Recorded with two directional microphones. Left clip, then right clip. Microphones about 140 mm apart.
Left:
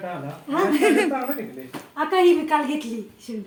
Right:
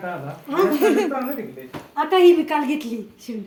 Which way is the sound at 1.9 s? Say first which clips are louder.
Right 3 dB; 45° right (ahead or behind).